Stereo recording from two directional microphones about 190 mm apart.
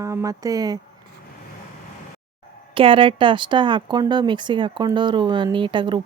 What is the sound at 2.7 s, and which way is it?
Speech, 25° right (ahead or behind).